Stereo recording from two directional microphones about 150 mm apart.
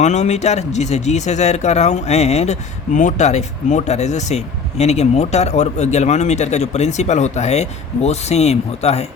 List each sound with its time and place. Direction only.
0.0 s speech: 50° left (ahead or behind)